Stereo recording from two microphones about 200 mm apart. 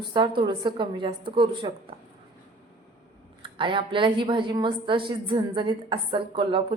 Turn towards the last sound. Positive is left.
turn(degrees=-25)  # may be behind; listen again after turning